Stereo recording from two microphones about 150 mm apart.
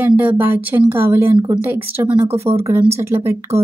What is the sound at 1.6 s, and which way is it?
Speech, 15° right (ahead or behind).